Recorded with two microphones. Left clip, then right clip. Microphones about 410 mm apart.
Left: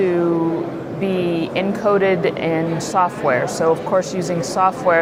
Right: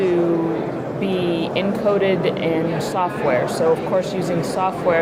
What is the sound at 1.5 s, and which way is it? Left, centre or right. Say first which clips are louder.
Speech: left 2 dB; left.